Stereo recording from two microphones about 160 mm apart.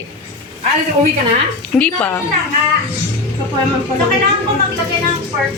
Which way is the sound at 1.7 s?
10° left (ahead or behind).